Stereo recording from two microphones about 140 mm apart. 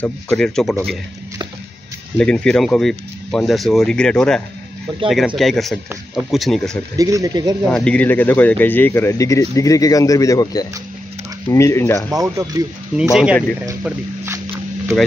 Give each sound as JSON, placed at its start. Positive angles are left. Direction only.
{"t": 0.0, "sound": "speech", "side_deg": 10}
{"t": 2.1, "sound": "speech", "side_deg": 5}
{"t": 7.0, "sound": "speech", "side_deg": -25}
{"t": 7.7, "sound": "speech", "side_deg": 5}
{"t": 12.1, "sound": "speech", "side_deg": -25}
{"t": 13.1, "sound": "speech", "side_deg": -5}